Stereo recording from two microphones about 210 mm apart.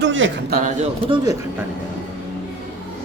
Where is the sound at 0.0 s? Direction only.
65° right (ahead or behind).